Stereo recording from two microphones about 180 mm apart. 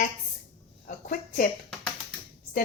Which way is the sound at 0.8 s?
50° left (ahead or behind).